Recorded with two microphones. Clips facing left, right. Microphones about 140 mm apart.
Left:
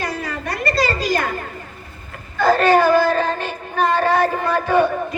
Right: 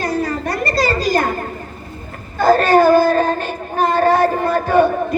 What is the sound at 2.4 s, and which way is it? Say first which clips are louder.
Child singing: right 3 dB; 40° right (ahead or behind).